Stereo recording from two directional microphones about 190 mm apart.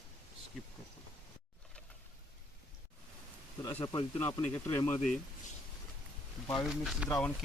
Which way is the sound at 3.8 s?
25° left (ahead or behind).